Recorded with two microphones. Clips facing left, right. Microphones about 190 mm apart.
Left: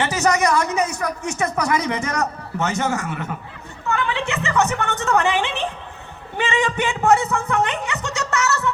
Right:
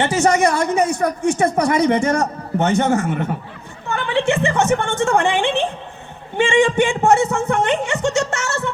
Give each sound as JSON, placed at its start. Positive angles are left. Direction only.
{"t": 0.0, "sound": "speech", "side_deg": -30}
{"t": 3.8, "sound": "a sound", "side_deg": -30}
{"t": 4.4, "sound": "speech", "side_deg": -30}